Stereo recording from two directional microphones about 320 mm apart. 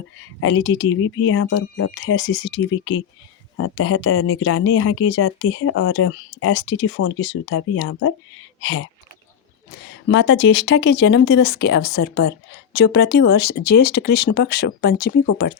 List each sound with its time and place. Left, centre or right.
0.3 s speech: left
10.1 s speech: left